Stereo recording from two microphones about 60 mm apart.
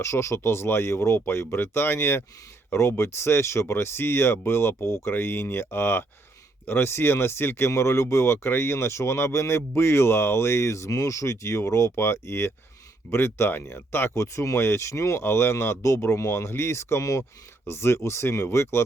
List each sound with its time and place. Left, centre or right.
0.0 s speech: left
14.2 s speech: left
17.0 s speech: left
17.7 s speech: left